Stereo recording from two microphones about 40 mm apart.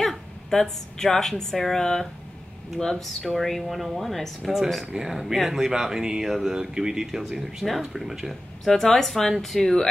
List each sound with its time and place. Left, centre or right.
0.0 s a sound: centre
1.3 s a woman's voice: centre
3.3 s speech: centre
4.9 s speech: centre
8.6 s a woman's voice: centre